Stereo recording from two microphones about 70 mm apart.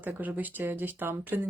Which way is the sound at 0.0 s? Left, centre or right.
Right.